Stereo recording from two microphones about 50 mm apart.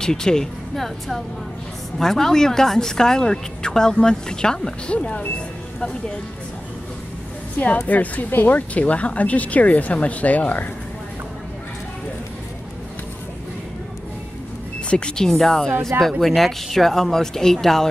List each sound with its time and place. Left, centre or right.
0.0 s speech: centre
7.5 s speech: left
14.9 s speech: centre
15.2 s speech: centre